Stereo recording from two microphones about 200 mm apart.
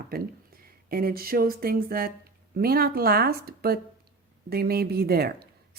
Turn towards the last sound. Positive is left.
turn(degrees=-50)  # may be behind; listen again after turning